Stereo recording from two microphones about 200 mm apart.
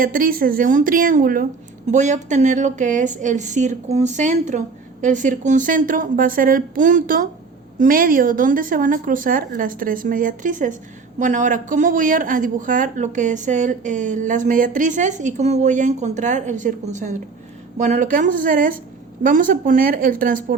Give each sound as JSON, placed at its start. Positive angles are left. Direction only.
{"t": 0.0, "sound": "speech", "side_deg": -45}